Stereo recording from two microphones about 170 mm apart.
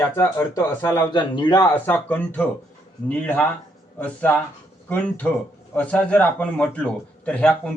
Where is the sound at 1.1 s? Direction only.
25° left (ahead or behind).